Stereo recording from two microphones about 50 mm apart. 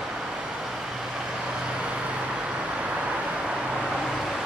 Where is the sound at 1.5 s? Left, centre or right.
Centre.